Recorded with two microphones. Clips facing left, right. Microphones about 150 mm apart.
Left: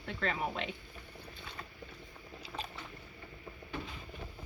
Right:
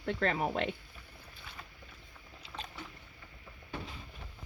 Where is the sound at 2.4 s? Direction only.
5° left (ahead or behind).